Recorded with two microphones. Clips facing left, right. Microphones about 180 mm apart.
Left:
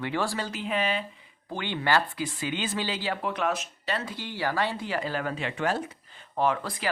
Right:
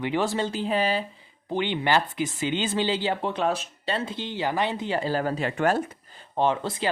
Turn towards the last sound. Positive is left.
turn(degrees=-25)  # may be behind; listen again after turning